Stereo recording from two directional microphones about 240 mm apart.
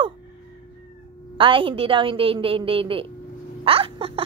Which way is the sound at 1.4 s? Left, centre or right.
Right.